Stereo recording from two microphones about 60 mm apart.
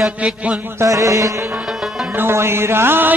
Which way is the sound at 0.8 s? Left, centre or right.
Right.